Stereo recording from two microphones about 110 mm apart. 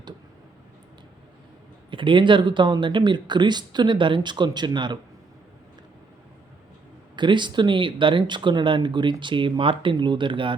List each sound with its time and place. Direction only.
1.9 s speech: 50° right (ahead or behind)
7.2 s speech: 45° right (ahead or behind)